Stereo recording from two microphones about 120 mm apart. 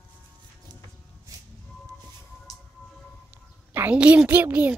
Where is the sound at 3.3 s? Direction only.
15° right (ahead or behind).